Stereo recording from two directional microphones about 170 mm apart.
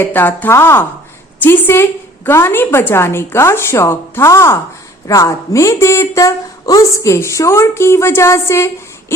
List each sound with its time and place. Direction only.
0.0 s speech: 10° left (ahead or behind)